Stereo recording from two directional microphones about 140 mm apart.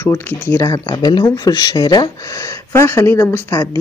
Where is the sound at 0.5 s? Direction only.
25° left (ahead or behind).